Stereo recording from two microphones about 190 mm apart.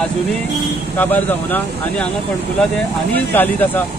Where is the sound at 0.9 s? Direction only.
10° left (ahead or behind).